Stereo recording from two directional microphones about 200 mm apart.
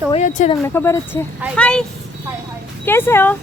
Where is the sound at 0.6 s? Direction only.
10° left (ahead or behind).